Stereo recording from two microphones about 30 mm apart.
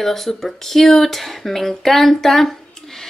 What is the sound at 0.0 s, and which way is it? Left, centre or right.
Speech, centre.